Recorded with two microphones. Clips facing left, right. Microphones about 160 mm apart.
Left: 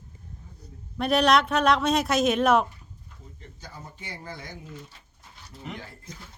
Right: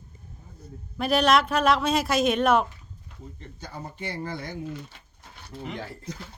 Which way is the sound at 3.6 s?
70° right (ahead or behind).